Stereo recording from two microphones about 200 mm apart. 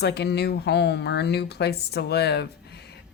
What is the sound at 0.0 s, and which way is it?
A woman's voice, 55° left (ahead or behind).